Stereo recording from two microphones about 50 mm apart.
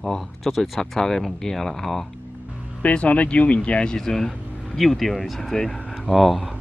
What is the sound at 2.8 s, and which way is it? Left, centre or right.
Speech, left.